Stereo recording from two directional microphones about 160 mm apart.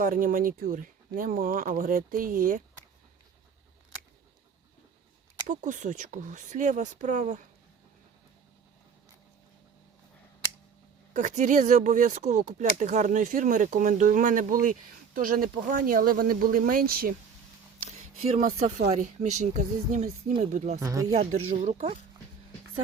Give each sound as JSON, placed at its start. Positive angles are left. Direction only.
{"t": 0.0, "sound": "speech", "side_deg": -60}
{"t": 5.5, "sound": "speech", "side_deg": -50}
{"t": 11.1, "sound": "speech", "side_deg": -50}
{"t": 17.8, "sound": "speech", "side_deg": -45}
{"t": 20.7, "sound": "speech", "side_deg": -20}
{"t": 21.5, "sound": "speech", "side_deg": -45}